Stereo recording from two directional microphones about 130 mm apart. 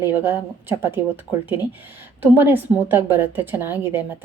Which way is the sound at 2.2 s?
15° right (ahead or behind).